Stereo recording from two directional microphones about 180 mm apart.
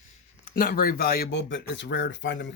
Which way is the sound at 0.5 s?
55° left (ahead or behind).